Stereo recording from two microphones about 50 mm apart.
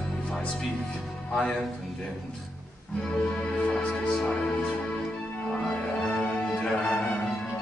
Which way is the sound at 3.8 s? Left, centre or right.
Left.